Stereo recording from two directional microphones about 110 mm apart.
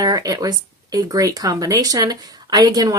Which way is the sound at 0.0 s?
35° right (ahead or behind).